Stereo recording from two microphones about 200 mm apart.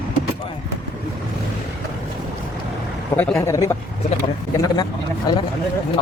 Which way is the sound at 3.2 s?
10° left (ahead or behind).